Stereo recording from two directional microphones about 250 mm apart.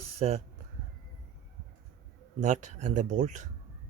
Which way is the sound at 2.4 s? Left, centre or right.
Right.